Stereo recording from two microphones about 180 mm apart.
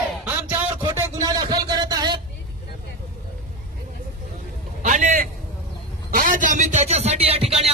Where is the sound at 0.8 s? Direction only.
15° right (ahead or behind).